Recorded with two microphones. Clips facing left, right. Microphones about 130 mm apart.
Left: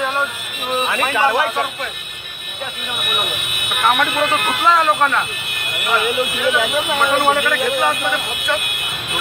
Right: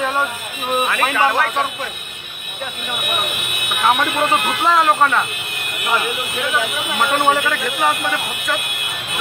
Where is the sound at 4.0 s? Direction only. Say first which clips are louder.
Even; 25° right (ahead or behind).